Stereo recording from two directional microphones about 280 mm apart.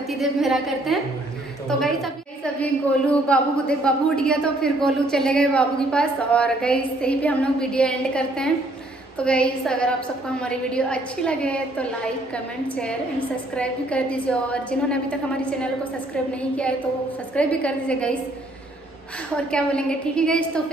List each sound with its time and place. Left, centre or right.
0.2 s a woman's voice: centre
13.6 s a woman's voice: centre
17.4 s a woman's voice: centre
19.5 s a woman's voice: centre